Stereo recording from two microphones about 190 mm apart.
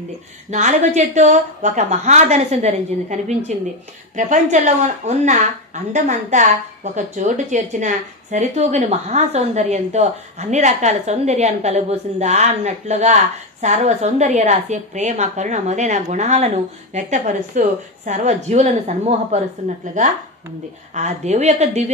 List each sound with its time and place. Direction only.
0.5 s a woman's voice: 35° right (ahead or behind)